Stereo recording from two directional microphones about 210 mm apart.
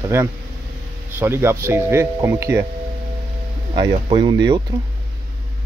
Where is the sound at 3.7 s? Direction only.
20° right (ahead or behind).